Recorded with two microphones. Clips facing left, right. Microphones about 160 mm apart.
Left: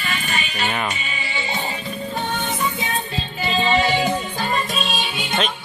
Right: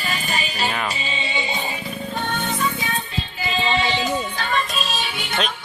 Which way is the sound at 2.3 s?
20° left (ahead or behind).